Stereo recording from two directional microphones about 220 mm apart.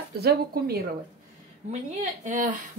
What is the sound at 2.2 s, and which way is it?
Speech, 35° right (ahead or behind).